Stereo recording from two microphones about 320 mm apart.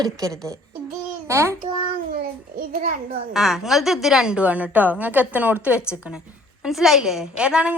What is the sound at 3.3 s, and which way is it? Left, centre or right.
A woman's voice, centre.